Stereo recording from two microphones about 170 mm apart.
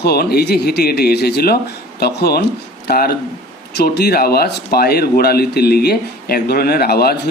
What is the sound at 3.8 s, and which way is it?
Speech, 75° left (ahead or behind).